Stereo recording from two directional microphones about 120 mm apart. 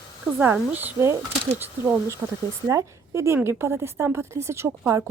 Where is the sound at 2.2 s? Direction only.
15° right (ahead or behind).